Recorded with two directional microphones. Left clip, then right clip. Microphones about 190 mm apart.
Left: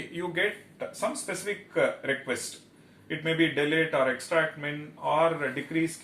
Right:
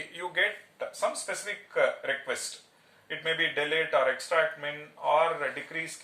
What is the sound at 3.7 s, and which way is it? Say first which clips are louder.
Speech: even; 15° right (ahead or behind).